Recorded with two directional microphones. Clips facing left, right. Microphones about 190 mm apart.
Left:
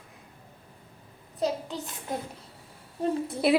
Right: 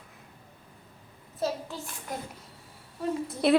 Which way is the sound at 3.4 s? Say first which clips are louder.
Right 1 dB; 5° left (ahead or behind).